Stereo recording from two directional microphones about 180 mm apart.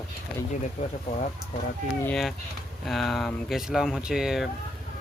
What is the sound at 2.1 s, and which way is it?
Speech, centre (ahead or behind).